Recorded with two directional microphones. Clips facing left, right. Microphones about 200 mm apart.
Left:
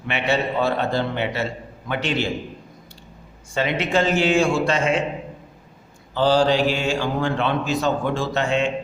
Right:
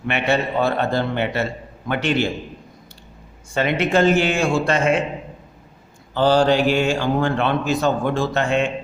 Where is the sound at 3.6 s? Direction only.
55° right (ahead or behind).